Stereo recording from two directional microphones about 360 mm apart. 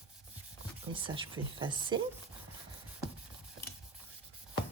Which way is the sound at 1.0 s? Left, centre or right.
Centre.